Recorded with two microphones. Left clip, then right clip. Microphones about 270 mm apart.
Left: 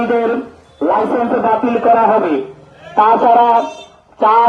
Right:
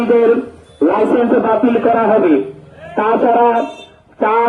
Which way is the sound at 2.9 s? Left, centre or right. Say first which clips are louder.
Left 3 dB; centre.